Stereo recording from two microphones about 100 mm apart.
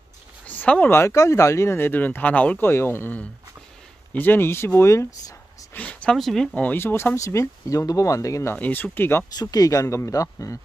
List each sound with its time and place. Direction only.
0.5 s speech: 15° left (ahead or behind)
5.8 s a sound: 15° left (ahead or behind)
6.1 s speech: 5° left (ahead or behind)
6.5 s speech: 15° left (ahead or behind)
8.5 s speech: 15° left (ahead or behind)
9.3 s speech: 40° left (ahead or behind)